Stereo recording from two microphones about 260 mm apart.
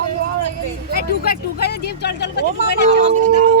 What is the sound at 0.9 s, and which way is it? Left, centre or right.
Speech, left.